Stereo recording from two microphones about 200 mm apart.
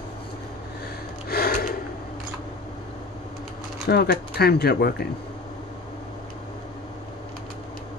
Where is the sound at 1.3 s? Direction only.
50° left (ahead or behind).